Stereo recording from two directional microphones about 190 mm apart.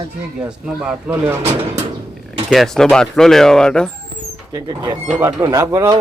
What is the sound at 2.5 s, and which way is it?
Speech, centre (ahead or behind).